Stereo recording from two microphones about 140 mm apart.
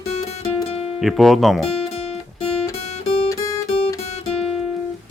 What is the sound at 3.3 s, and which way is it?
Guitar, 25° left (ahead or behind).